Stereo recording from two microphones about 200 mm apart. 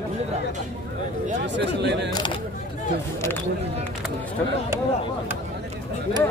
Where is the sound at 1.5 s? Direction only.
60° right (ahead or behind).